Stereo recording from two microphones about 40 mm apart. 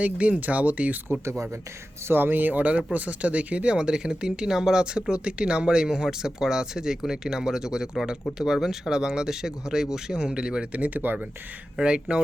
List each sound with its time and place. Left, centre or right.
0.0 s speech: right
2.0 s speech: right
10.7 s speech: right
11.8 s speech: right